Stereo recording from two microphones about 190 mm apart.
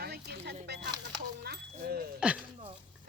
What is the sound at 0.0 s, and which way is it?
Music, 60° right (ahead or behind).